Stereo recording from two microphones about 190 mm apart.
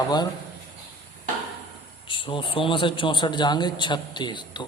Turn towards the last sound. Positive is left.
turn(degrees=25)  # may be behind; listen again after turning